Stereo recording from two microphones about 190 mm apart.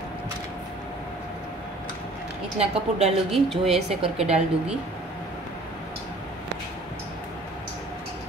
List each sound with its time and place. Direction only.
2.6 s speech: 35° right (ahead or behind)
3.4 s speech: centre (ahead or behind)